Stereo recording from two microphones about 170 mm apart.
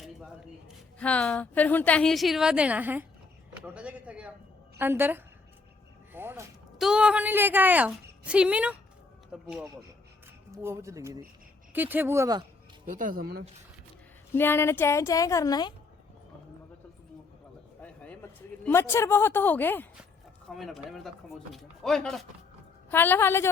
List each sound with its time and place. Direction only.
0.9 s a woman's voice: 5° left (ahead or behind); by 6.5 s 15° right (ahead or behind)
6.7 s a woman's voice: 5° right (ahead or behind)
10.5 s a woman's voice: 15° right (ahead or behind)
12.8 s speech: 55° right (ahead or behind)
14.3 s a woman's voice: 15° left (ahead or behind)
17.8 s a woman's voice: 10° left (ahead or behind)
20.5 s a woman's voice: centre (ahead or behind)